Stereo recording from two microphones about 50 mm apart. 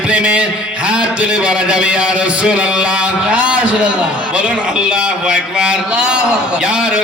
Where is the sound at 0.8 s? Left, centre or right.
Right.